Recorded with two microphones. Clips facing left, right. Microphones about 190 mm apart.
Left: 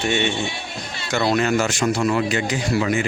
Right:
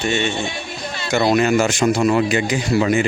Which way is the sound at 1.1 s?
15° right (ahead or behind).